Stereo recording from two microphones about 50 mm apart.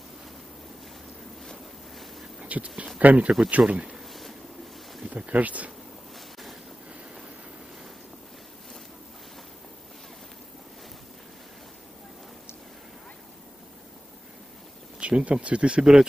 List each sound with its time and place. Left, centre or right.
1.4 s ocean: centre
2.4 s a sound: right
3.0 s speech: right
3.9 s a sound: centre
5.1 s speech: right
15.0 s speech: right